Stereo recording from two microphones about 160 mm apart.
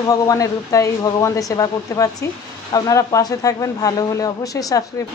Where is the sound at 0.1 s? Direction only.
20° left (ahead or behind).